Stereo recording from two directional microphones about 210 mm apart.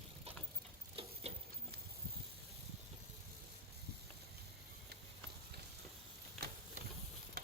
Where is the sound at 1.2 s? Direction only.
30° right (ahead or behind).